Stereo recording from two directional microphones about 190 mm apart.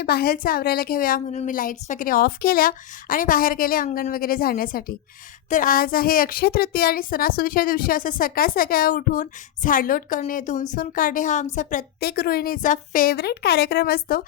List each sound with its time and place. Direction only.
0.0 s a woman's voice: 55° left (ahead or behind)